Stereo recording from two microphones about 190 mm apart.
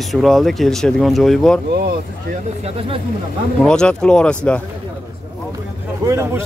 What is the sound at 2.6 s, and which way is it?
Speech, 30° right (ahead or behind).